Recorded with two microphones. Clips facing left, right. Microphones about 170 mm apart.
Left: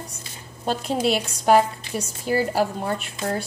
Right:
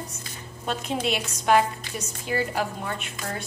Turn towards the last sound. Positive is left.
turn(degrees=35)  # may be behind; listen again after turning